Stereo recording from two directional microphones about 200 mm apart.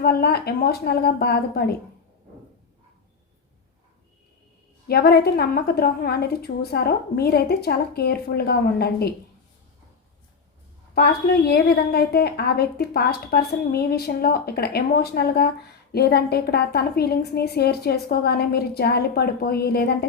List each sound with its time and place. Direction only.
0.0 s a woman's voice: 50° left (ahead or behind)
4.9 s a woman's voice: 50° left (ahead or behind)
10.9 s a woman's voice: 50° left (ahead or behind)